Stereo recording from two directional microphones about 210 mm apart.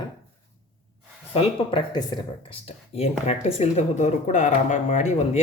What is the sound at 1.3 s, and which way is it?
Speech, 25° left (ahead or behind).